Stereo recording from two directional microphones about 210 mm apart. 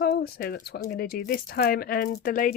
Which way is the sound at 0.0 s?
50° left (ahead or behind).